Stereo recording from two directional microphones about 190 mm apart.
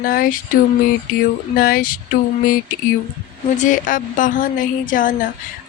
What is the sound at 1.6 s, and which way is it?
Speech, 50° left (ahead or behind).